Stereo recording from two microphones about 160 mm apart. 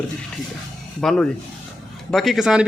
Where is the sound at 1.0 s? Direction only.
5° left (ahead or behind).